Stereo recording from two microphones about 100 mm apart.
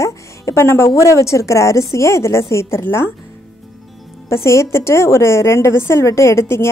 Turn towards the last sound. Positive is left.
turn(degrees=30)  # may be behind; listen again after turning